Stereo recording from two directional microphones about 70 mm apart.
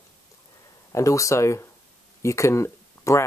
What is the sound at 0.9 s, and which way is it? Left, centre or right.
Speech, left.